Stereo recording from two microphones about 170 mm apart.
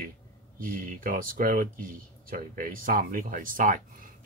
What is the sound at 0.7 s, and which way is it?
Speech, 55° right (ahead or behind).